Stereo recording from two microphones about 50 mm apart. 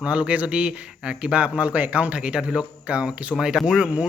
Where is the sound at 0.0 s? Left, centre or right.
Right.